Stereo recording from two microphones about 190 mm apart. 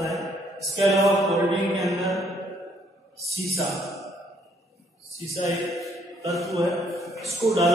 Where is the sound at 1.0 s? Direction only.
Centre (ahead or behind).